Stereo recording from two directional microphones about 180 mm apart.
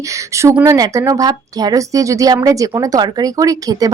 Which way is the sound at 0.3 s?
15° right (ahead or behind).